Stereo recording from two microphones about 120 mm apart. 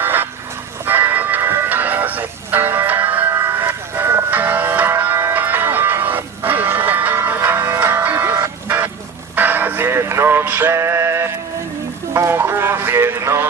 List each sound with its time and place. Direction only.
0.0 s vehicle: 15° right (ahead or behind)
0.9 s music: 15° right (ahead or behind)